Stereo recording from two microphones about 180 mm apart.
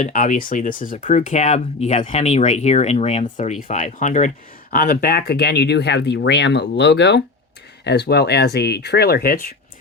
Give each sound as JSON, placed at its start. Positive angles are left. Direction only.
{"t": 0.0, "sound": "speech", "side_deg": 45}
{"t": 4.7, "sound": "speech", "side_deg": 55}